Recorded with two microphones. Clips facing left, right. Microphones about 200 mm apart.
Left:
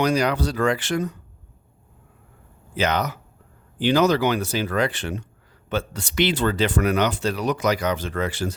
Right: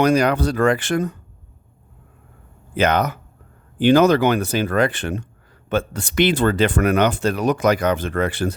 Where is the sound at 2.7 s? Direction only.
55° right (ahead or behind).